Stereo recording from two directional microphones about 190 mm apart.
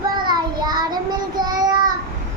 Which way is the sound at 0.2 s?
20° right (ahead or behind).